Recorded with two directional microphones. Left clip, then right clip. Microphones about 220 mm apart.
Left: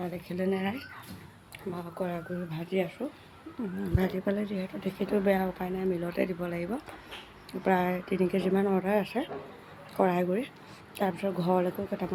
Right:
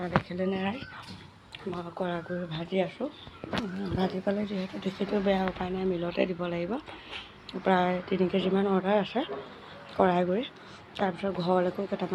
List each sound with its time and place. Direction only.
0.0 s speech: 20° left (ahead or behind)